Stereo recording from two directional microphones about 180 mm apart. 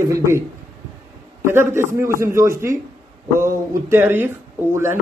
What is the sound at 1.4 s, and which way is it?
A man's voice, 15° right (ahead or behind).